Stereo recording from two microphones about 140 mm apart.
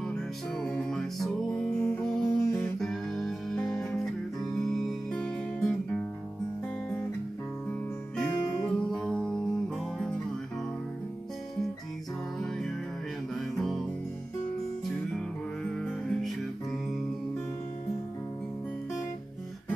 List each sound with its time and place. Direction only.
0.1 s music: 5° left (ahead or behind)
8.2 s music: 5° left (ahead or behind)
13.3 s music: centre (ahead or behind)
15.8 s music: 5° left (ahead or behind)